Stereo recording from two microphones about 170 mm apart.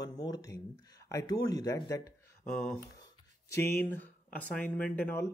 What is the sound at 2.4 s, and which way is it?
Speech, 5° left (ahead or behind).